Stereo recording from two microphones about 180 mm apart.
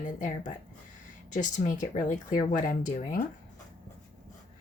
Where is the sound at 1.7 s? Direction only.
45° left (ahead or behind).